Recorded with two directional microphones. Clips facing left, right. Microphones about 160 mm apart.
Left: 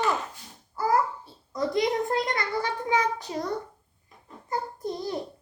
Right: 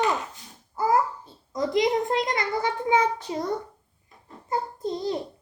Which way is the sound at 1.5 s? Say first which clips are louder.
Right 2 dB; 20° right (ahead or behind).